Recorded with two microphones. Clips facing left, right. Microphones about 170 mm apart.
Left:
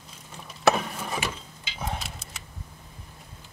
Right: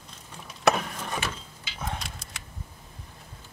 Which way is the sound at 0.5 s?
Centre (ahead or behind).